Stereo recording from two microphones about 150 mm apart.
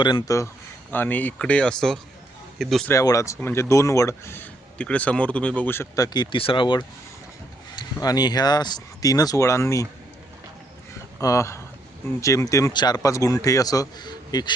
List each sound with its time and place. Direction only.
0.0 s speech: 30° left (ahead or behind)
0.9 s speech: 10° left (ahead or behind)
2.8 s speech: 20° left (ahead or behind)
6.1 s speech: 35° left (ahead or behind); by 9.8 s 20° left (ahead or behind)
11.2 s speech: 20° left (ahead or behind)